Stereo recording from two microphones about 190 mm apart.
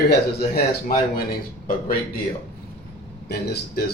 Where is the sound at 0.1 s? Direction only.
55° left (ahead or behind).